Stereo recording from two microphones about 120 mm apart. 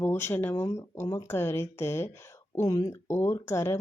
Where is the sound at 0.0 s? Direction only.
20° left (ahead or behind).